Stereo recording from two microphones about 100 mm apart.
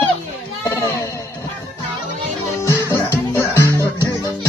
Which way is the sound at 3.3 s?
25° left (ahead or behind).